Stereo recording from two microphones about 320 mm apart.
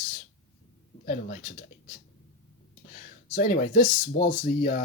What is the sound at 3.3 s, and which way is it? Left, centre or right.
Speech, left.